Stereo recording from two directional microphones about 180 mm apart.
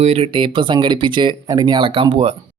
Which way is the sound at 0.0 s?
35° right (ahead or behind).